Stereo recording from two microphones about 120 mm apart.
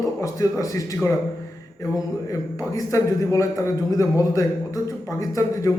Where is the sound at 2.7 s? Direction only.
25° left (ahead or behind).